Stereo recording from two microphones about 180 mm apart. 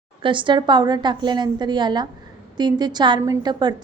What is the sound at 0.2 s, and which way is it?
A woman's voice, 25° right (ahead or behind).